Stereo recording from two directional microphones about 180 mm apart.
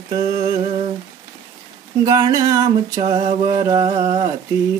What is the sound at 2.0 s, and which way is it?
Music, 20° right (ahead or behind).